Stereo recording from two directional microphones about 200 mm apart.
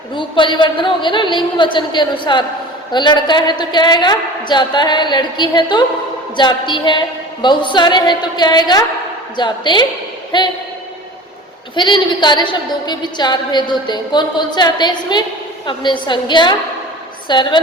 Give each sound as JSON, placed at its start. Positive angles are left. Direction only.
{"t": 0.1, "sound": "a woman's voice", "side_deg": 25}
{"t": 11.7, "sound": "a woman's voice", "side_deg": 25}